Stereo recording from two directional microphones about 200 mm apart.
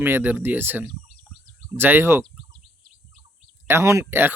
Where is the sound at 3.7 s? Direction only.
15° right (ahead or behind).